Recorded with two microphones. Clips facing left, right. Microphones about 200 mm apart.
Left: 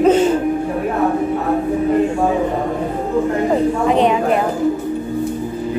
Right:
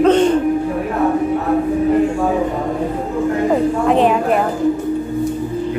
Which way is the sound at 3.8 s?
Centre (ahead or behind).